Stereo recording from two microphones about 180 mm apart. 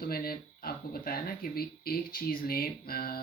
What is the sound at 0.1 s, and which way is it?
Speech, 55° left (ahead or behind).